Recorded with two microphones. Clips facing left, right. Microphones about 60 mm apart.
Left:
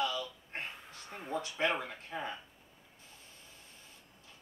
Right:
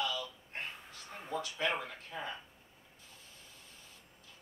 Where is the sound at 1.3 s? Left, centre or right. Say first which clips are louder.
Left 2 dB; left.